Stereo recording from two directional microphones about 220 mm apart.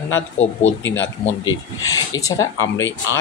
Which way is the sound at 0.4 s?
30° left (ahead or behind).